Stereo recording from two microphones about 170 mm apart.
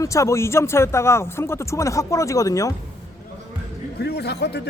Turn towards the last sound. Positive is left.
turn(degrees=75)  # may be behind; listen again after turning